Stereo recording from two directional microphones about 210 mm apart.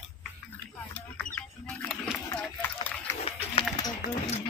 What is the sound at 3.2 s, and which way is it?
Run, 20° left (ahead or behind).